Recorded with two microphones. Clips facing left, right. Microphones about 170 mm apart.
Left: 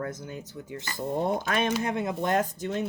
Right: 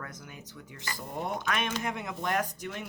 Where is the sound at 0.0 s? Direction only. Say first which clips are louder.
Left 10 dB; 30° left (ahead or behind).